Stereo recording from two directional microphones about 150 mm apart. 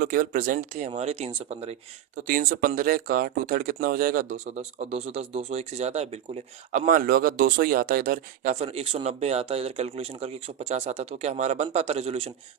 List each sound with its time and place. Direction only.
0.0 s speech: 65° right (ahead or behind)
0.9 s speech: 45° right (ahead or behind)
2.2 s speech: 65° right (ahead or behind)
4.5 s speech: 40° right (ahead or behind); by 8.5 s 70° right (ahead or behind)
8.5 s speech: 40° right (ahead or behind)